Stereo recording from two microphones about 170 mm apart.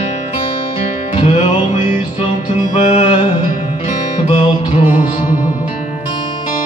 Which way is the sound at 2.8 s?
35° left (ahead or behind).